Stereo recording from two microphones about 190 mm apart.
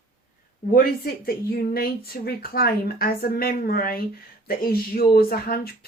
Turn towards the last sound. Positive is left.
turn(degrees=55)  # may be behind; listen again after turning